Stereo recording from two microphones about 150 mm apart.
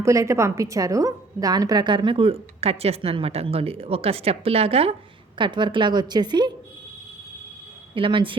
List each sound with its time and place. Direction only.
0.0 s a woman's voice: 20° right (ahead or behind)
7.9 s a woman's voice: 35° right (ahead or behind)